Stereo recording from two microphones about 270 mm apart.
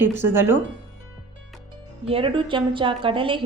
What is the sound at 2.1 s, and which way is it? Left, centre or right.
A woman's voice, centre.